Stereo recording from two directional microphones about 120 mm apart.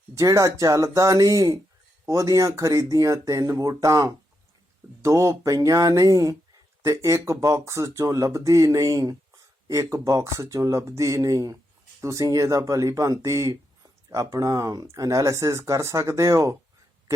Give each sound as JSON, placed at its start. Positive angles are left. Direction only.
{"t": 0.1, "sound": "speech", "side_deg": -25}